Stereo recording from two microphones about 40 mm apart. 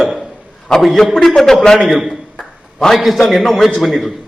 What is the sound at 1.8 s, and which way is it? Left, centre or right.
A man's voice, centre.